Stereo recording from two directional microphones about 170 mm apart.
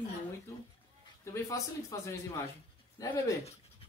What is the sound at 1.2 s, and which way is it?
A man's voice, 20° left (ahead or behind).